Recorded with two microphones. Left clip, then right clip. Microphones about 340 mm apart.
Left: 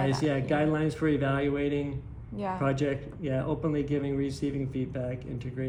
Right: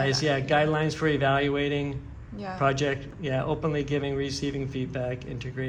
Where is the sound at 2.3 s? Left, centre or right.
Left.